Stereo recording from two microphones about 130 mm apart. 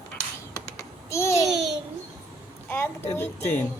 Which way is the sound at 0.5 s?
25° left (ahead or behind).